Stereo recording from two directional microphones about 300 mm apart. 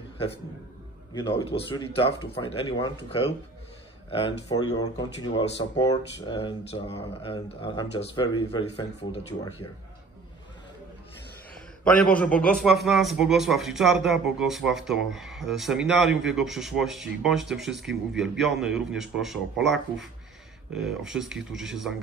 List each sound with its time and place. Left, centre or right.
1.1 s speech: centre
11.5 s a man's voice: centre